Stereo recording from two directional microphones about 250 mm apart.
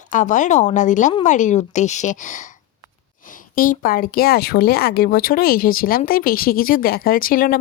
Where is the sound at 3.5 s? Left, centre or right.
Left.